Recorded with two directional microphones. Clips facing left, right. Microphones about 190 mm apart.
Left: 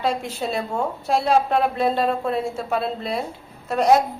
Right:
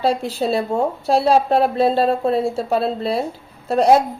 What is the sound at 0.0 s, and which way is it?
A woman's voice, 35° right (ahead or behind).